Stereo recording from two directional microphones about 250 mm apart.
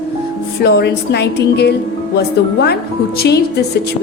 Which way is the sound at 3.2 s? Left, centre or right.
Left.